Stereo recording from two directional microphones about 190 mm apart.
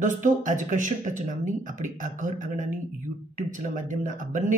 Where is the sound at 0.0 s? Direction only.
40° right (ahead or behind).